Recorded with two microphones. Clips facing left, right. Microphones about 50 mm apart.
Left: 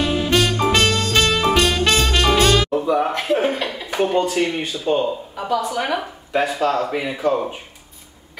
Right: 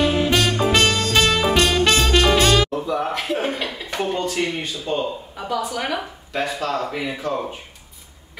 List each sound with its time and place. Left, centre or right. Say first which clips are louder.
0.0 s music: even; centre
2.8 s a man's voice: left 4 dB; centre
4.0 s speech: left 5 dB; centre